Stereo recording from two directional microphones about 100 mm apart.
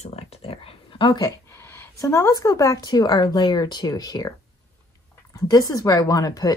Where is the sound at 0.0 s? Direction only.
90° left; by 1.3 s 50° left (ahead or behind).